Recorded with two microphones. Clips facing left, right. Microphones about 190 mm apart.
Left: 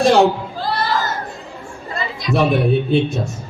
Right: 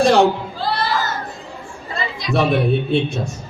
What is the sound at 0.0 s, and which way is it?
Speech, centre (ahead or behind).